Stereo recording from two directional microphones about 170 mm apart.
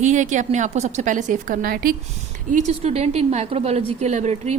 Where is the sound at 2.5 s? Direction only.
45° right (ahead or behind).